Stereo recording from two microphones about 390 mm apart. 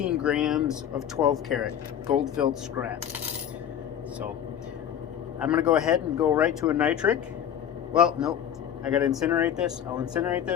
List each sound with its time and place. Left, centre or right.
0.0 s speech: centre
5.4 s speech: centre